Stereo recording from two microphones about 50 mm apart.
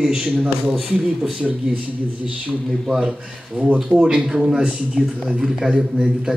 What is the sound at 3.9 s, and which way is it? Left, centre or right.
A man's voice, centre.